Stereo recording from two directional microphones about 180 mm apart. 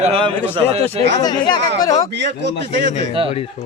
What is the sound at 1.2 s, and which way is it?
Speech, 25° left (ahead or behind).